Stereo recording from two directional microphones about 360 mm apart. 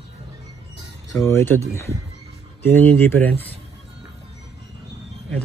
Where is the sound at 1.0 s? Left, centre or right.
Centre.